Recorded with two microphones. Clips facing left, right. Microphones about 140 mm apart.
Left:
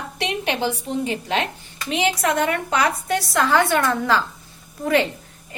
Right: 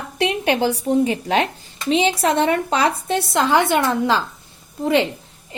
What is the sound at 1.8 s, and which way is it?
A woman's voice, 25° right (ahead or behind).